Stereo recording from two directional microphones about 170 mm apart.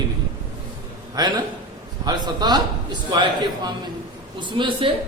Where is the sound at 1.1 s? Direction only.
20° right (ahead or behind).